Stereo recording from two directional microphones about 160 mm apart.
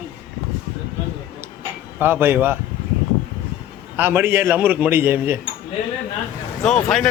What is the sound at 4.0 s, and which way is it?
A man's voice, 15° right (ahead or behind).